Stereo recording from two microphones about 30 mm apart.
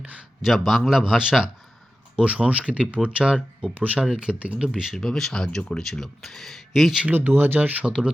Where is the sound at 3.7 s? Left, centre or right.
Right.